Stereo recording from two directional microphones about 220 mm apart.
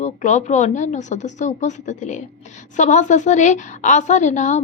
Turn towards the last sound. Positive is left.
turn(degrees=30)  # may be behind; listen again after turning